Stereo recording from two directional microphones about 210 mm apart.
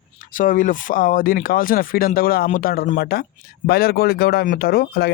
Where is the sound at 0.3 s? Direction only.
40° left (ahead or behind).